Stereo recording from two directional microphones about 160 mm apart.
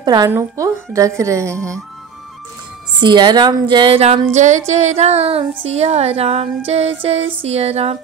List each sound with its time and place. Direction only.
0.0 s a woman's voice: 25° right (ahead or behind)
3.0 s a woman's voice: 30° right (ahead or behind)
4.3 s music: 50° right (ahead or behind)